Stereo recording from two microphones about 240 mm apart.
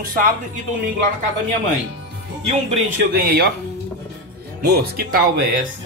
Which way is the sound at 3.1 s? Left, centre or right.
Right.